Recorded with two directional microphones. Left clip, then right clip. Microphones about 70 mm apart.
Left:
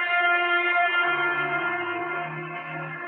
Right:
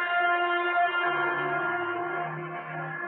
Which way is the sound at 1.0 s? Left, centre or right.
Centre.